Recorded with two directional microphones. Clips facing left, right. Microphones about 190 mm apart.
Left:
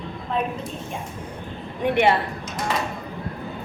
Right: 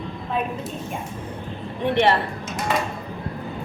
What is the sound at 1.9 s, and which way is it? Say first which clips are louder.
Speech: even; 10° left (ahead or behind).